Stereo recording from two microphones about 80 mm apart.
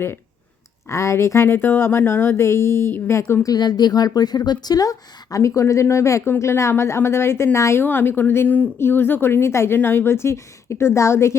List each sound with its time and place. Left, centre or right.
0.9 s a woman's voice: left
3.4 s a woman's voice: left